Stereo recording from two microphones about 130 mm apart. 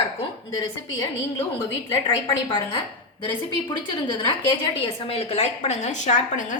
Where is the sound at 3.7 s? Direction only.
35° left (ahead or behind).